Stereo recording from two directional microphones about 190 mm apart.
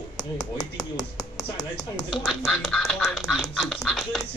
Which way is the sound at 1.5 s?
20° left (ahead or behind).